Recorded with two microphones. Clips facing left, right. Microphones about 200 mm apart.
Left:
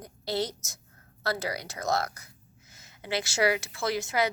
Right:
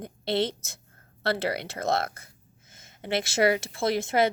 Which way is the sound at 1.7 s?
60° right (ahead or behind).